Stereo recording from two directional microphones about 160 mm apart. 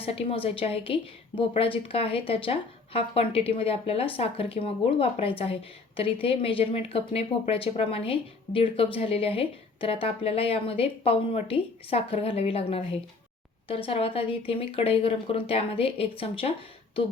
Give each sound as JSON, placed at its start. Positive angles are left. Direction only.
{"t": 0.0, "sound": "speech", "side_deg": 35}